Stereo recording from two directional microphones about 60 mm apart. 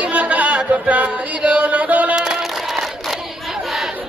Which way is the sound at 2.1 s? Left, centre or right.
Centre.